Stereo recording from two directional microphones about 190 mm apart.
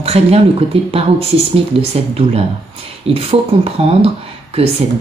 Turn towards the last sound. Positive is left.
turn(degrees=-30)  # may be behind; listen again after turning